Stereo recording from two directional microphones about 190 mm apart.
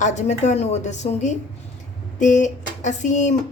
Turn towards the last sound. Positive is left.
turn(degrees=40)  # may be behind; listen again after turning